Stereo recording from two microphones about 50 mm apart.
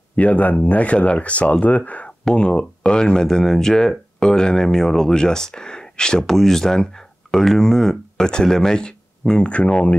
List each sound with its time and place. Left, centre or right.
0.1 s speech: left